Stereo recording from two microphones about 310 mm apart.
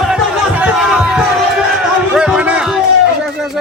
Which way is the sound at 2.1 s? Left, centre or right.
Centre.